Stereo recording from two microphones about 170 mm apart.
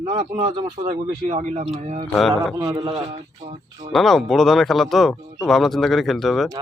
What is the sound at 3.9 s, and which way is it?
Speech, centre (ahead or behind).